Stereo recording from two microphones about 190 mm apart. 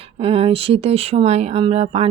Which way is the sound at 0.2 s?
30° right (ahead or behind).